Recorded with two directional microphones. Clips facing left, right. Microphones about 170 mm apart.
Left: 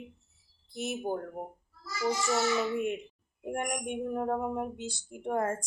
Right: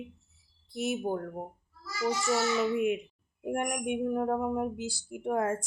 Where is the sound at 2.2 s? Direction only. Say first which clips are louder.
Right 2 dB; 5° right (ahead or behind).